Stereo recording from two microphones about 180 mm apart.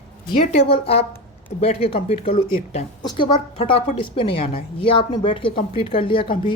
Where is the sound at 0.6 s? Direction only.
30° left (ahead or behind).